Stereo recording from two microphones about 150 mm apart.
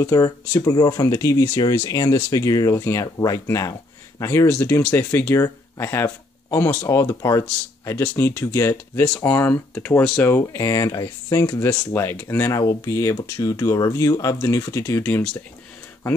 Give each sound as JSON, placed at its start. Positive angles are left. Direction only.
{"t": 0.0, "sound": "speech", "side_deg": 20}